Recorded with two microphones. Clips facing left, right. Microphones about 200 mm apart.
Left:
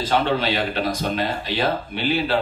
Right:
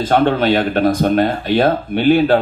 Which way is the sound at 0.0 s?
50° right (ahead or behind).